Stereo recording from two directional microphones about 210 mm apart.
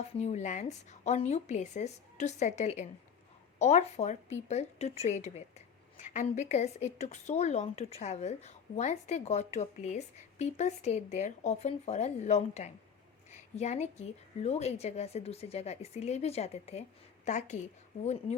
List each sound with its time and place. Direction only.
0.2 s speech: 35° left (ahead or behind)